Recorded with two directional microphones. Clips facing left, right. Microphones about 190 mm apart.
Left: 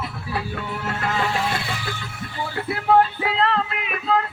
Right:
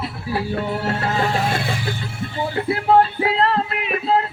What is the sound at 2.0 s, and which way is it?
Music, 25° right (ahead or behind).